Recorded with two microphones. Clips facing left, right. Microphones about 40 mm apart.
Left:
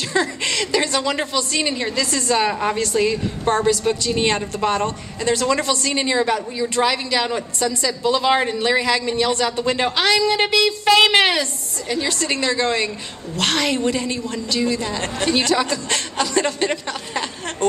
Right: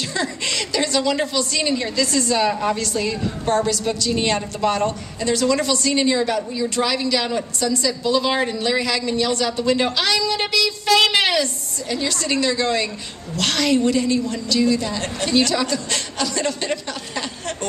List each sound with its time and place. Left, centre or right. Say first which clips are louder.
0.1 s a woman's voice: left 6 dB; left